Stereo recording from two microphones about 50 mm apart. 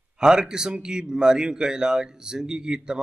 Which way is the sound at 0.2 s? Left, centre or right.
Centre.